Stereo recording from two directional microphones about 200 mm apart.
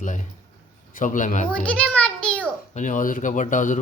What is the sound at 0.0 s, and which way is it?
A man's voice, 40° left (ahead or behind).